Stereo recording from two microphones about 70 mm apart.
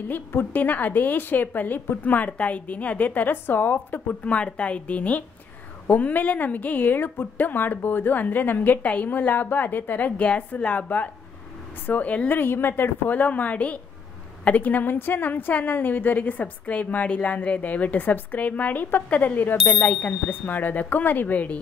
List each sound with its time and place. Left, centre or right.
0.1 s a woman's voice: left